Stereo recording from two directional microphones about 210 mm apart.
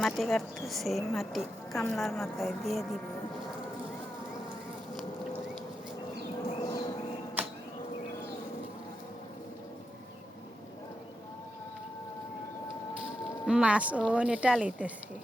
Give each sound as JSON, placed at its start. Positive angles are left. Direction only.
{"t": 0.0, "sound": "a woman's voice", "side_deg": 0}
{"t": 6.7, "sound": "a sound", "side_deg": 20}
{"t": 13.4, "sound": "a woman's voice", "side_deg": -5}